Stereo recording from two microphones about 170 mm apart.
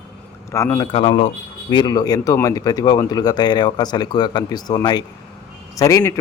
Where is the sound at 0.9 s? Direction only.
30° left (ahead or behind).